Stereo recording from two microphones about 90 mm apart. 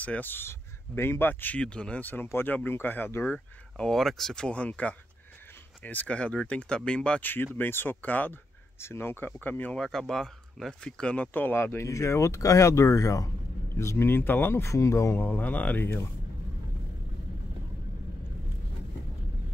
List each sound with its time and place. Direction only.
0.0 s speech: 20° left (ahead or behind)
3.7 s speech: 5° left (ahead or behind)
8.7 s speech: 30° left (ahead or behind)
9.8 s speech: 5° left (ahead or behind); by 15.1 s 35° left (ahead or behind)
15.1 s speech: 20° left (ahead or behind)